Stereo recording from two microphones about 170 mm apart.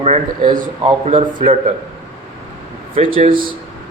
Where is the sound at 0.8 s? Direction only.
35° right (ahead or behind).